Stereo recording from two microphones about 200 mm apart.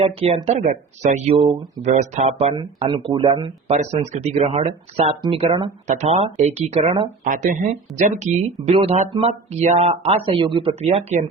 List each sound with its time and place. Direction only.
0.0 s speech: 30° right (ahead or behind)
7.3 s speech: 40° right (ahead or behind)